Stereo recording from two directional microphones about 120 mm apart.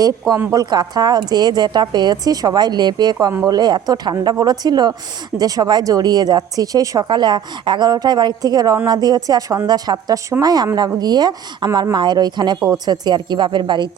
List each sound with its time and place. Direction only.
0.5 s speech: 35° right (ahead or behind)